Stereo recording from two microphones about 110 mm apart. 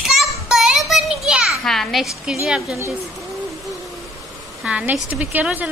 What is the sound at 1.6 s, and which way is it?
A woman's voice, 5° left (ahead or behind).